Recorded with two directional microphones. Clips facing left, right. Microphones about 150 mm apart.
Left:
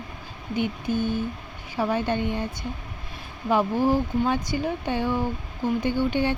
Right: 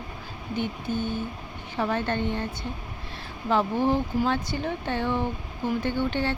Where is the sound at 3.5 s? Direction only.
10° left (ahead or behind).